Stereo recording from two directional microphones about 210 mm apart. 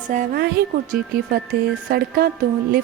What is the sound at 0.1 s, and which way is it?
A woman's voice, 40° right (ahead or behind).